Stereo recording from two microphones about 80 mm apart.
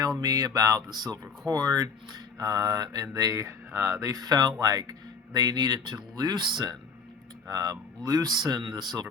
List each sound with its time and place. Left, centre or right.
0.0 s speech: right
7.4 s speech: right